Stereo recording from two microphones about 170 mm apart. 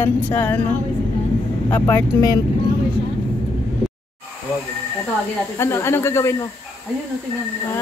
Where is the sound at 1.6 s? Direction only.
15° left (ahead or behind).